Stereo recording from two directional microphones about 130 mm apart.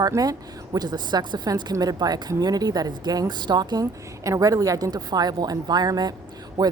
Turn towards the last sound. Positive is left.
turn(degrees=-30)  # may be behind; listen again after turning